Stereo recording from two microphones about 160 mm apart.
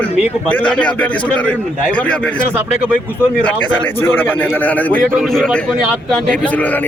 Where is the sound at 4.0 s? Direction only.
10° left (ahead or behind).